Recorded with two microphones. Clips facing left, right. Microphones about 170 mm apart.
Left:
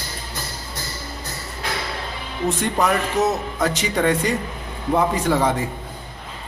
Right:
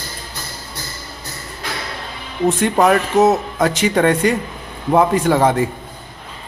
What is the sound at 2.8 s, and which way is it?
A man's voice, 50° right (ahead or behind).